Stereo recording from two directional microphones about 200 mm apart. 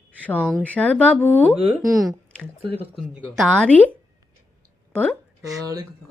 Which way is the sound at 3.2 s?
5° left (ahead or behind).